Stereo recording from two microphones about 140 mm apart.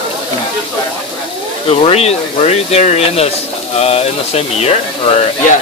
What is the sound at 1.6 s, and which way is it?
Speech, 45° left (ahead or behind).